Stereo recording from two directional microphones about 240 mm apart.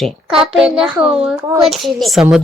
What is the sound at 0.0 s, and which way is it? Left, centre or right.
A woman's voice, centre.